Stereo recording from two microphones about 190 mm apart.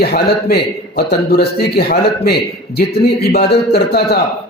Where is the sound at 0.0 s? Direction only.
55° left (ahead or behind).